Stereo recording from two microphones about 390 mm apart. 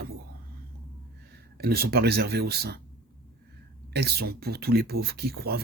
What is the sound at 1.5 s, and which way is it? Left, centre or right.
Speech, right.